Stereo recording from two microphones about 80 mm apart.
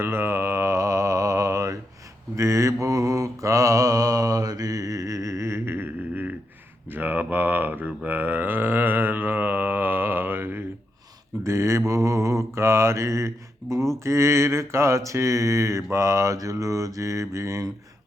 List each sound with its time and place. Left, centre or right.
0.0 s mantra: right
6.9 s a sound: right
11.4 s mantra: right